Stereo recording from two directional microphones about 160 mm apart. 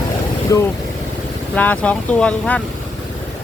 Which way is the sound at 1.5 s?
10° left (ahead or behind).